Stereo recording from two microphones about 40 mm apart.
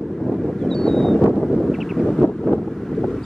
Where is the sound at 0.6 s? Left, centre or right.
Centre.